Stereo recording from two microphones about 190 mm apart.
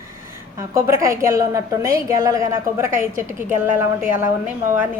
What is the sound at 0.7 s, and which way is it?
A woman's voice, 15° right (ahead or behind).